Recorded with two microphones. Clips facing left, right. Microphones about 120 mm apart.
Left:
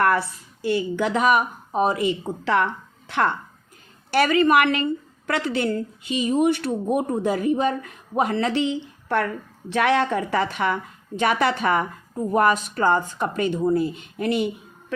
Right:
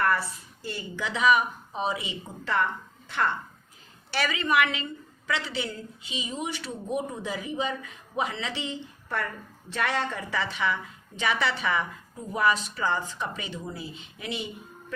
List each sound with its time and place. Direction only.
0.0 s a woman's voice: 65° left (ahead or behind)
4.1 s a woman's voice: 55° left (ahead or behind)